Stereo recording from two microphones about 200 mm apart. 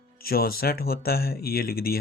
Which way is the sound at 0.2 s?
50° left (ahead or behind).